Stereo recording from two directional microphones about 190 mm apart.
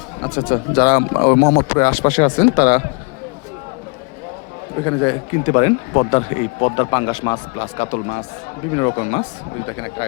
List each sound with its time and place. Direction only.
0.3 s speech: 45° left (ahead or behind)
4.9 s a man's voice: 25° left (ahead or behind)
7.8 s speech: 40° left (ahead or behind)
8.7 s speech: 30° left (ahead or behind)
9.6 s a man's voice: 20° left (ahead or behind)